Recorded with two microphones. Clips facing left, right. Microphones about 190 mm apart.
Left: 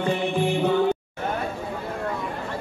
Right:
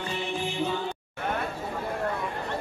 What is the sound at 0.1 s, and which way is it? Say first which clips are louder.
Music: left 8 dB; 55° left (ahead or behind).